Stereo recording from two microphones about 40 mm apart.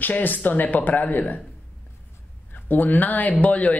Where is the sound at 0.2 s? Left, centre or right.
Left.